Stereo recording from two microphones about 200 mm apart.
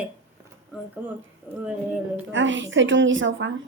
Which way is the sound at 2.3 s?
70° right (ahead or behind).